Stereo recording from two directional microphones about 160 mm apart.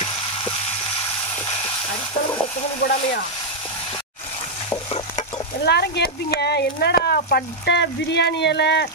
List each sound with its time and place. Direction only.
5.7 s speech: 90° left